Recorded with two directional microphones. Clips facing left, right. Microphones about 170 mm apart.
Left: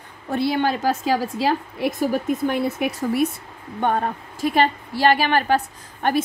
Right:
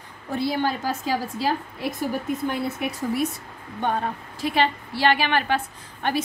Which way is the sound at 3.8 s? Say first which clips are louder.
Left 4 dB; 50° left (ahead or behind).